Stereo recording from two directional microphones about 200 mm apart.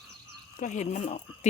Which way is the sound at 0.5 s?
40° left (ahead or behind).